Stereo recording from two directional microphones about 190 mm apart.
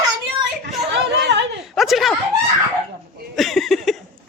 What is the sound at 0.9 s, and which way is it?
Chatter, 60° right (ahead or behind).